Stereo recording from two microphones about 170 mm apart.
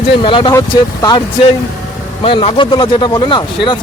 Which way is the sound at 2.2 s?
30° left (ahead or behind).